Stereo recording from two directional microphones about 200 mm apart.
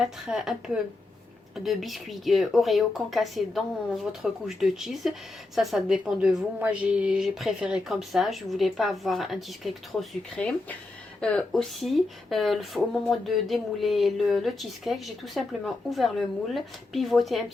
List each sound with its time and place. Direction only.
0.0 s speech: 5° right (ahead or behind)